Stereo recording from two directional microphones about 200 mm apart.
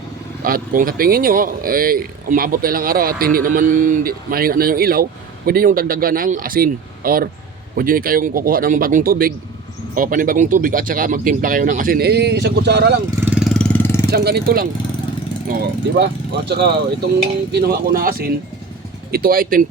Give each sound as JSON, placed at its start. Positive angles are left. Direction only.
{"t": 0.4, "sound": "speech", "side_deg": -45}
{"t": 13.3, "sound": "a sound", "side_deg": 0}
{"t": 14.1, "sound": "speech", "side_deg": -50}
{"t": 16.0, "sound": "speech", "side_deg": -55}